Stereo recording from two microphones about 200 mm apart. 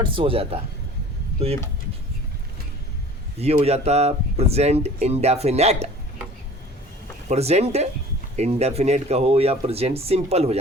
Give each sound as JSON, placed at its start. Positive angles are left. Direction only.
{"t": 0.0, "sound": "speech", "side_deg": -25}
{"t": 3.3, "sound": "speech", "side_deg": -30}
{"t": 7.3, "sound": "speech", "side_deg": -30}